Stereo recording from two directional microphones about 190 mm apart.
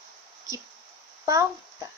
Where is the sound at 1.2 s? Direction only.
15° right (ahead or behind).